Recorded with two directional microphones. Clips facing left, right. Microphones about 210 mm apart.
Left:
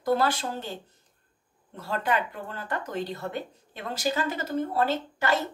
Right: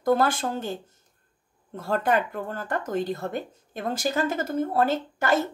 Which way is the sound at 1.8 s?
45° right (ahead or behind).